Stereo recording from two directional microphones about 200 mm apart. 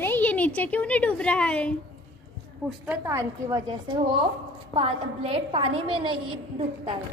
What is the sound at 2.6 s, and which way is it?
A woman's voice, 10° right (ahead or behind).